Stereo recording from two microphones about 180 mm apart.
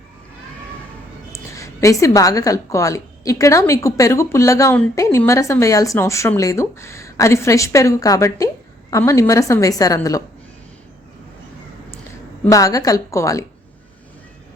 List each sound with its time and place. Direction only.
1.3 s a woman's voice: 15° left (ahead or behind)
12.5 s a woman's voice: 20° left (ahead or behind)